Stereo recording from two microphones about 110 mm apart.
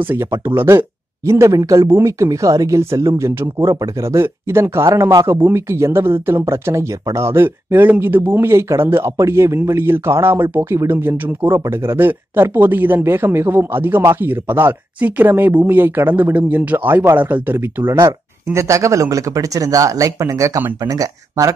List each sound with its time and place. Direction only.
0.0 s speech: 20° right (ahead or behind)